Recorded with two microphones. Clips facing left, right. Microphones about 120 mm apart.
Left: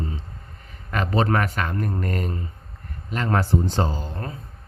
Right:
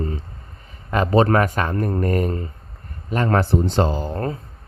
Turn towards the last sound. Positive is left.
turn(degrees=-45)  # may be behind; listen again after turning